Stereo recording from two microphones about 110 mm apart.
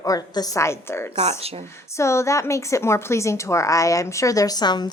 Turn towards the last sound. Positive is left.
turn(degrees=40)  # may be behind; listen again after turning